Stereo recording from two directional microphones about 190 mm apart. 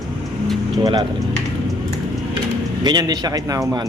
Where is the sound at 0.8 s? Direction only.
20° right (ahead or behind).